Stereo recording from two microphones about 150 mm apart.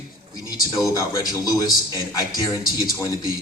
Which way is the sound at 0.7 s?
20° left (ahead or behind).